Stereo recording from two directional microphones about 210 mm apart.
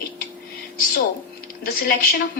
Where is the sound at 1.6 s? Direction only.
50° left (ahead or behind).